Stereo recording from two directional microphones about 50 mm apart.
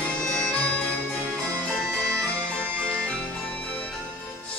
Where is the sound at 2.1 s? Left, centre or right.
Centre.